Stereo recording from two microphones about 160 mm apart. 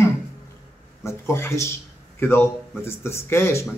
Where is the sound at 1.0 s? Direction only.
15° left (ahead or behind).